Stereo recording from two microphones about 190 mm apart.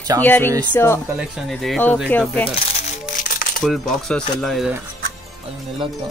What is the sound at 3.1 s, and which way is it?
Coin, 45° left (ahead or behind).